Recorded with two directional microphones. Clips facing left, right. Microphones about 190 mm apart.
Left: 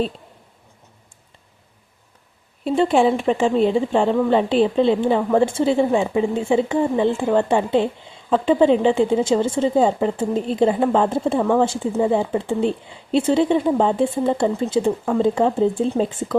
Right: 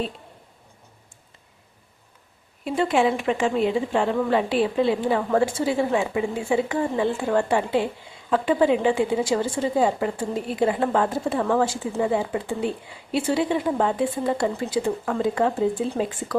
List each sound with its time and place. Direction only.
2.6 s a woman's voice: 30° left (ahead or behind)